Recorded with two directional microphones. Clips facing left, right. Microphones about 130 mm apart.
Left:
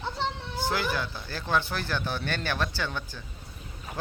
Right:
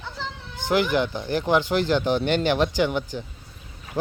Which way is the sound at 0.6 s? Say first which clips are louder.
Right 8 dB; 20° right (ahead or behind).